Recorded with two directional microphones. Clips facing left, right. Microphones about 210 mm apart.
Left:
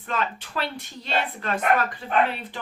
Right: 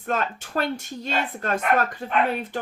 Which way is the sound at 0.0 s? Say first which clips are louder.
Right 2 dB; 45° right (ahead or behind).